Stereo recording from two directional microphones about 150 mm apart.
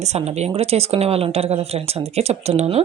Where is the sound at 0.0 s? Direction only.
45° right (ahead or behind).